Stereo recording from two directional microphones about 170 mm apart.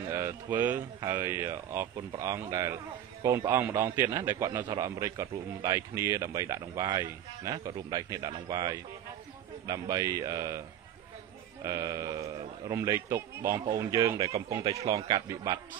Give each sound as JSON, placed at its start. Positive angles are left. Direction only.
{"t": 0.1, "sound": "a man's voice", "side_deg": -15}
{"t": 11.6, "sound": "a man's voice", "side_deg": -20}